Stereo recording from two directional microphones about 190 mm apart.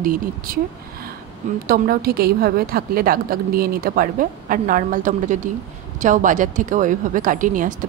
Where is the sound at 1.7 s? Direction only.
50° right (ahead or behind).